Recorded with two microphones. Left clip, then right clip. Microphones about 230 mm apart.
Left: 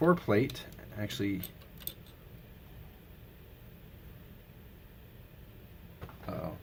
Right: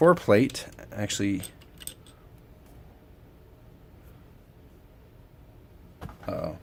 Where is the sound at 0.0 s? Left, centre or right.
Right.